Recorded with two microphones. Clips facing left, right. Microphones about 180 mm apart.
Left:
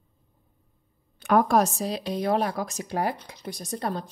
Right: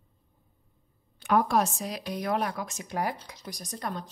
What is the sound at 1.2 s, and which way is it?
Speech, 50° left (ahead or behind).